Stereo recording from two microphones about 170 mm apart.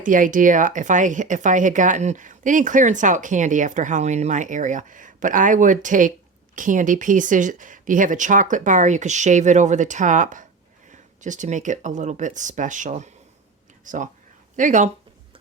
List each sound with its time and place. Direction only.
0.0 s speech: 50° right (ahead or behind)